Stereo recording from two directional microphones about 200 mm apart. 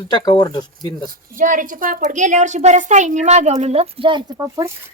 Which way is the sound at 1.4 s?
40° right (ahead or behind).